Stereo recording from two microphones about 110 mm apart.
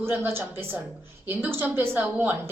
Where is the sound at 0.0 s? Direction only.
20° right (ahead or behind).